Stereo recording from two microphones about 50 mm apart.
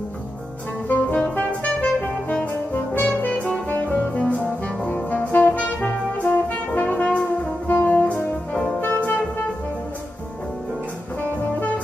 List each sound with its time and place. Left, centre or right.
0.8 s music: left
2.7 s music: left
3.7 s music: left
4.8 s brass instrument: left
8.8 s music: left